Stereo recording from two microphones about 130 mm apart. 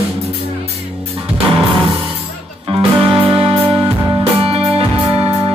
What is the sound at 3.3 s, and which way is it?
Music, 45° right (ahead or behind).